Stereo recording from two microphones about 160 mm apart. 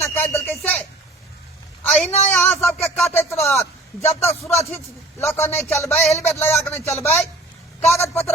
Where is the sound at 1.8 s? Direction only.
10° left (ahead or behind).